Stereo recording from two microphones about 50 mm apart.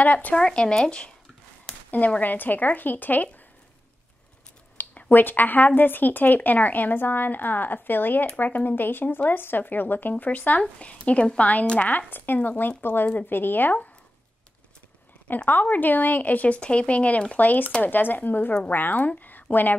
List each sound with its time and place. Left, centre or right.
0.0 s speech: left
0.4 s speech: centre
1.9 s speech: left
4.8 s a sound: left
5.1 s a woman's voice: left
12.4 s speech: left
15.2 s speech: left